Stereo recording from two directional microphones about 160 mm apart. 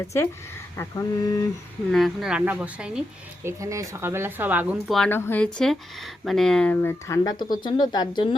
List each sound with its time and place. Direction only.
0.8 s speech: 20° left (ahead or behind)
1.9 s speech: centre (ahead or behind)
3.4 s speech: 20° right (ahead or behind)
4.9 s speech: 5° left (ahead or behind); by 8.4 s 30° left (ahead or behind)